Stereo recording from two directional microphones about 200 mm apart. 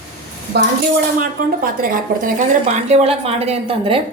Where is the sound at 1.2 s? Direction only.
45° right (ahead or behind); by 4.0 s 25° right (ahead or behind).